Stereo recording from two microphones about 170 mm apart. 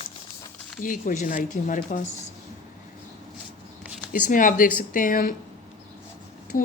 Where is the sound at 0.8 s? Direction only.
50° left (ahead or behind).